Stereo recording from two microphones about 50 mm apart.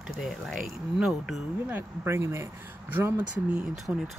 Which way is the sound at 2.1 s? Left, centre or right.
Right.